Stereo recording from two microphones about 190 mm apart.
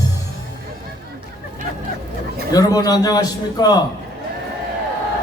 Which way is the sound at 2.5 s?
20° left (ahead or behind).